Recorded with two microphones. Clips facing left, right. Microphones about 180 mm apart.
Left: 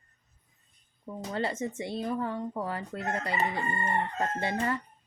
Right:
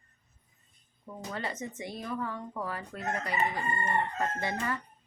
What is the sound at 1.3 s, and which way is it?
Speech, 30° left (ahead or behind).